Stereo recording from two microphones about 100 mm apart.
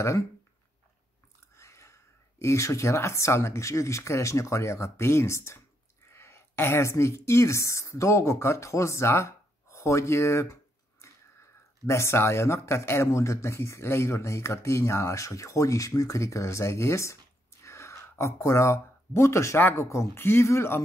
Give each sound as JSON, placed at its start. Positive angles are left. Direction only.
{"t": 1.6, "sound": "a woman's voice", "side_deg": 30}